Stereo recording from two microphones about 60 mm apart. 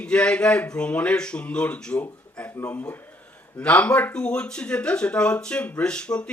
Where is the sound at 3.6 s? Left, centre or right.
Left.